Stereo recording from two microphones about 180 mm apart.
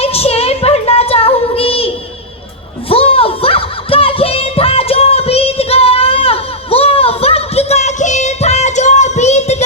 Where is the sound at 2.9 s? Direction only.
30° left (ahead or behind).